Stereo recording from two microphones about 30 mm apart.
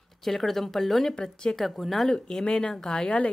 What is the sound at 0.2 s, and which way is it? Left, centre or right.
Speech, centre.